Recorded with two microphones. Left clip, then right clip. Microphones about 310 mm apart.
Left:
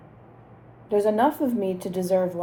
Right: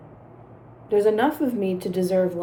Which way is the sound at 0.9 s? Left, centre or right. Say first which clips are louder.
Right 1 dB; centre.